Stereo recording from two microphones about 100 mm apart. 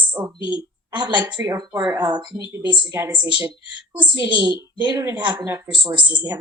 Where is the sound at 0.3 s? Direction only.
50° left (ahead or behind).